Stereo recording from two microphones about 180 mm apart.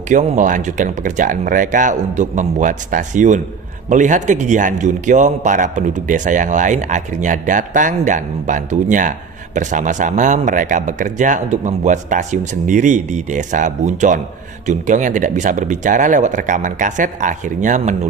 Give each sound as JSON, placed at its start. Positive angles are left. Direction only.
{"t": 0.1, "sound": "a man's voice", "side_deg": -45}